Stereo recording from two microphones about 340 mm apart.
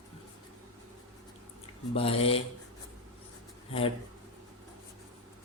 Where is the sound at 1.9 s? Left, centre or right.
Centre.